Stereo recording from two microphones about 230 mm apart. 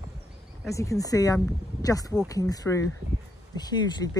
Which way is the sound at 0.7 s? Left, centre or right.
Centre.